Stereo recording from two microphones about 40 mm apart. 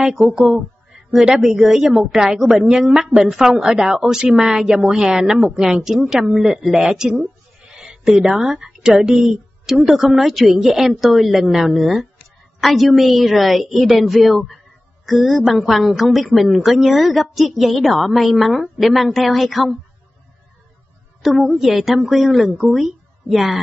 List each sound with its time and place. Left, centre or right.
0.0 s a woman's voice: centre
21.2 s a woman's voice: centre